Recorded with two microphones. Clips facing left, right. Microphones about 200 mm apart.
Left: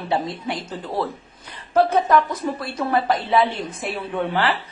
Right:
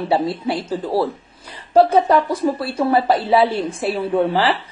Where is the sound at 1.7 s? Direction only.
30° right (ahead or behind).